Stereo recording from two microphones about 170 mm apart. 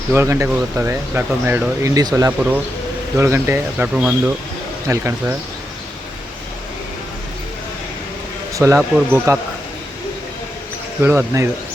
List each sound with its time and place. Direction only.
0.1 s speech: 15° right (ahead or behind)
8.5 s speech: 20° right (ahead or behind)
11.0 s speech: 15° right (ahead or behind)